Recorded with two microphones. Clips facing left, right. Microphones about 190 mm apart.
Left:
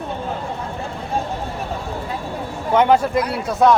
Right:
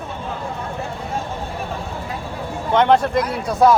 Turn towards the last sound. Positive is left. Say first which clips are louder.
# even
turn(degrees=0)  # may be behind; listen again after turning